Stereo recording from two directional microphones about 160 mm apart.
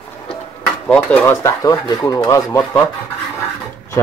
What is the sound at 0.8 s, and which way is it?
Speech, 5° left (ahead or behind).